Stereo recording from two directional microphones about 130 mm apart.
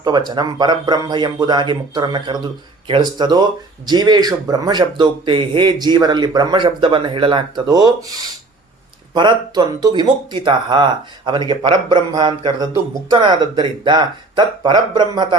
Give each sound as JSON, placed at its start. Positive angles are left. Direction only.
{"t": 0.0, "sound": "speech", "side_deg": -35}